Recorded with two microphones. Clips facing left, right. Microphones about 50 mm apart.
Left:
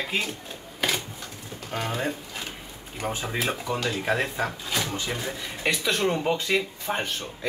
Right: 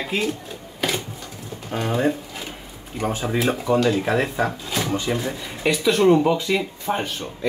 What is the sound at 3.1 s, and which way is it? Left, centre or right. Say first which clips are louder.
Speech: right 6 dB; centre.